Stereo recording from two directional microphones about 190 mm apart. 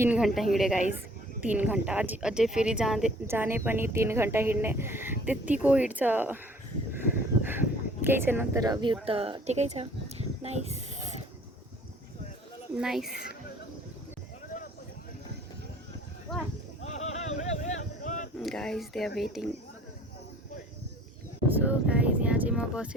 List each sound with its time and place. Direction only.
0.0 s speech: 5° right (ahead or behind)
6.9 s a sound: 10° right (ahead or behind)
8.0 s speech: 10° right (ahead or behind); by 10.7 s 35° right (ahead or behind)
12.7 s speech: 5° right (ahead or behind)
16.8 s a sound: 35° left (ahead or behind)
18.3 s speech: 5° left (ahead or behind)
21.5 s speech: 10° right (ahead or behind)